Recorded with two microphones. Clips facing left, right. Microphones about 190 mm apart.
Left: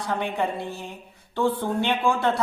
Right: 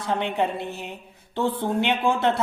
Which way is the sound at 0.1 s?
25° right (ahead or behind).